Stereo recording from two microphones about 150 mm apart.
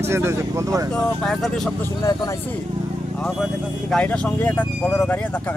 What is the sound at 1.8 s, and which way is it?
Speech, 25° left (ahead or behind).